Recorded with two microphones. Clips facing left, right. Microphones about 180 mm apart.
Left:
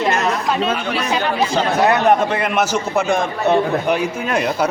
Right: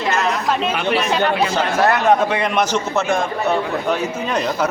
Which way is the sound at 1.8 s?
15° left (ahead or behind).